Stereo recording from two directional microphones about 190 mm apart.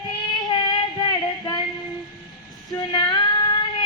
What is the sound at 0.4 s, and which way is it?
Child singing, 20° left (ahead or behind).